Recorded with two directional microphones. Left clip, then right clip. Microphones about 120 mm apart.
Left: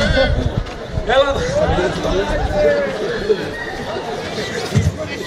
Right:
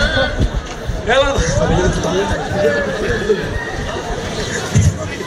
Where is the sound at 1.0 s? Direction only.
35° right (ahead or behind).